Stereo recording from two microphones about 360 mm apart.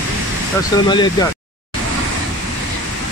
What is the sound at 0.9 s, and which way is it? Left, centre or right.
Speech, centre.